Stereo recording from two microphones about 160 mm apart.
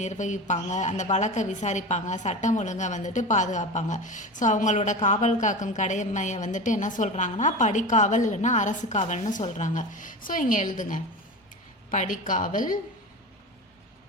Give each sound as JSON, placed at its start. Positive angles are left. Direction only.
{"t": 0.0, "sound": "a woman's voice", "side_deg": 50}